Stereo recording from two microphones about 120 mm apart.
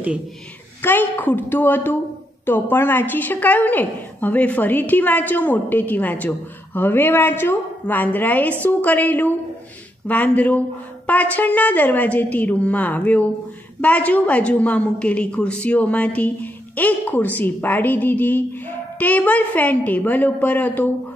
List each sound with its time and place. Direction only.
0.8 s a woman's voice: 15° left (ahead or behind)